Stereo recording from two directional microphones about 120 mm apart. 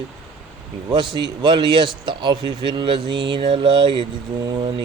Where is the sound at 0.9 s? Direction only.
40° right (ahead or behind).